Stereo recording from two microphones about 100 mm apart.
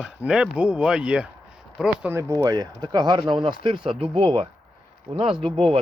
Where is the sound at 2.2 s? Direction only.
35° right (ahead or behind); by 5.5 s 65° right (ahead or behind).